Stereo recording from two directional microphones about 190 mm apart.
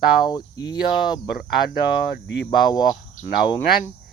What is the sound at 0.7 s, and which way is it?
Cricket, 20° left (ahead or behind).